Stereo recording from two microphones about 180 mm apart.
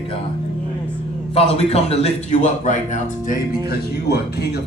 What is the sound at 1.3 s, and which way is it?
A man's voice, 35° left (ahead or behind).